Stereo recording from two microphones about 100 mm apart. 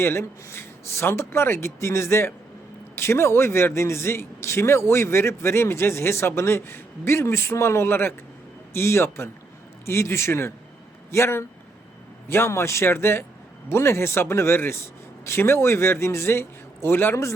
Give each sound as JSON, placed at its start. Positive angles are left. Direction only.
{"t": 0.0, "sound": "a man's voice", "side_deg": 25}